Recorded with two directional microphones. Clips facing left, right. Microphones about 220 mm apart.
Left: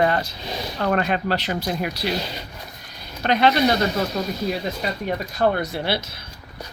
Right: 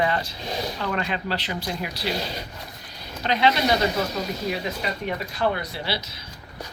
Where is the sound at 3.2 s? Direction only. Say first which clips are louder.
Left 3 dB; 55° left (ahead or behind).